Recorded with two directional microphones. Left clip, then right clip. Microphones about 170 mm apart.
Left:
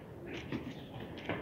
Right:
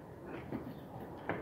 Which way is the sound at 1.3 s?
50° left (ahead or behind).